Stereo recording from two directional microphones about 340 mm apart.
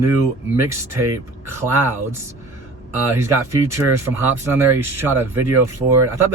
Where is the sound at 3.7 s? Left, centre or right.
Centre.